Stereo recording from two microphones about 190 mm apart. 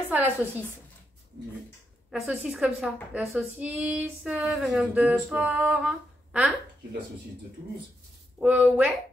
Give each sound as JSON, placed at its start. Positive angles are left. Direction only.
{"t": 0.1, "sound": "a woman's voice", "side_deg": -10}
{"t": 2.0, "sound": "a woman's voice", "side_deg": 0}
{"t": 8.4, "sound": "a woman's voice", "side_deg": -5}